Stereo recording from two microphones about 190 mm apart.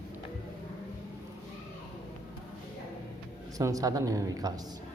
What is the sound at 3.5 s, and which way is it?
Speech, 20° right (ahead or behind).